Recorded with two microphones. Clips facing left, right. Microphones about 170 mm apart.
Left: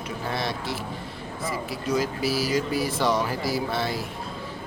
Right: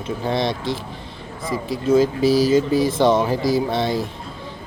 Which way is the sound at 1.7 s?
25° right (ahead or behind).